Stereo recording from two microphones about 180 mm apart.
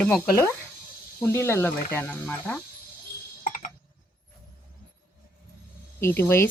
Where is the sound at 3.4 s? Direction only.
50° left (ahead or behind).